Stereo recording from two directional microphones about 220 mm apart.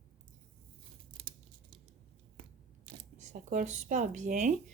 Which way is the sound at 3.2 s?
35° right (ahead or behind).